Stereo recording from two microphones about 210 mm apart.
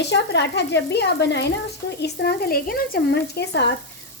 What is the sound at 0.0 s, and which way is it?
Speech, 55° left (ahead or behind).